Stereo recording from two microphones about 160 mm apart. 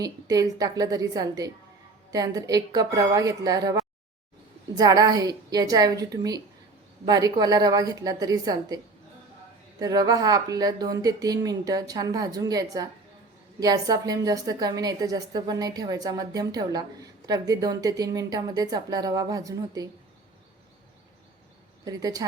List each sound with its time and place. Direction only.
0.0 s a woman's voice: 25° right (ahead or behind)
9.8 s a woman's voice: 25° right (ahead or behind)
21.8 s a woman's voice: 25° right (ahead or behind)